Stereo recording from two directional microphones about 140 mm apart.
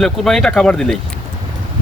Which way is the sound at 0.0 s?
Centre (ahead or behind).